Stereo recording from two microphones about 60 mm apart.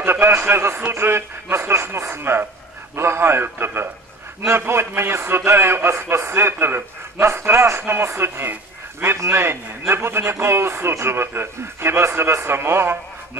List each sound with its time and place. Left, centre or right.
0.0 s a man's voice: right